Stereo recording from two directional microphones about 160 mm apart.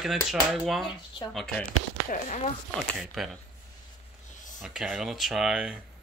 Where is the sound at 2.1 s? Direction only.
50° left (ahead or behind).